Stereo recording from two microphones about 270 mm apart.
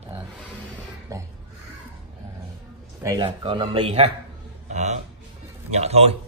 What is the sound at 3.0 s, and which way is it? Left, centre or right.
Speech, centre.